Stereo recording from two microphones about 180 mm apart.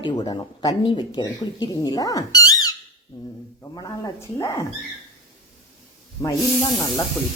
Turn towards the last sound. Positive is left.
turn(degrees=20)  # may be behind; listen again after turning